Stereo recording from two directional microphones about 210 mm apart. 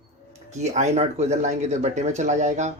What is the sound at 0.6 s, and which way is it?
Speech, 30° right (ahead or behind).